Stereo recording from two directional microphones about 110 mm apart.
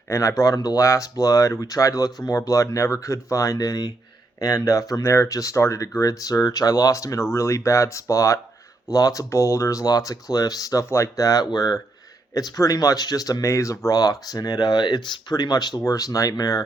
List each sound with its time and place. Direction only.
0.1 s speech: 30° left (ahead or behind)